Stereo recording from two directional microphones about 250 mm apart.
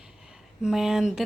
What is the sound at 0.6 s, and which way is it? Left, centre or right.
Speech, centre.